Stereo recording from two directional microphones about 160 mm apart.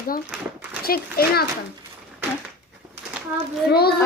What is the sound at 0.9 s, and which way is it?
Speech, 70° left (ahead or behind).